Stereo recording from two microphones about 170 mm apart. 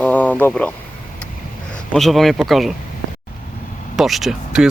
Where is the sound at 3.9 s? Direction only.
Centre (ahead or behind).